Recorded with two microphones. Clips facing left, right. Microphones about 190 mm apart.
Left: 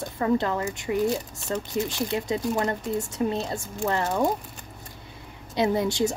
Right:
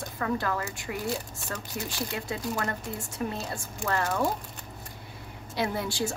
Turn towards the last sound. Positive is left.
turn(degrees=20)  # may be behind; listen again after turning